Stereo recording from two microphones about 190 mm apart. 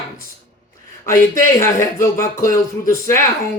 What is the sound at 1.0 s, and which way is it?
A man's voice, 15° left (ahead or behind).